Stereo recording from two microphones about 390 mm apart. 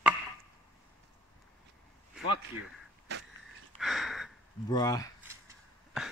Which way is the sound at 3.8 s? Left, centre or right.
Centre.